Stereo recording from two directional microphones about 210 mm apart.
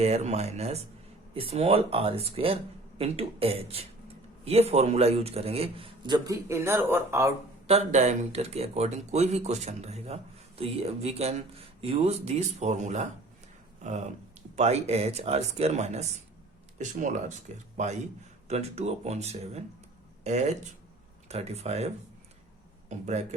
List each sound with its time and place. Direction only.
0.0 s a man's voice: 30° right (ahead or behind); by 7.3 s 15° right (ahead or behind)
7.7 s speech: 35° right (ahead or behind)